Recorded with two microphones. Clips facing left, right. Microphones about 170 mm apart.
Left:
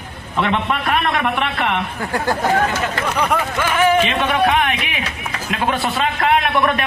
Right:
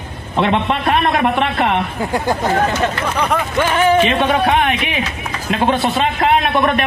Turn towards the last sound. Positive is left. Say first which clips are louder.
# right 2 dB
turn(degrees=-25)  # may be behind; listen again after turning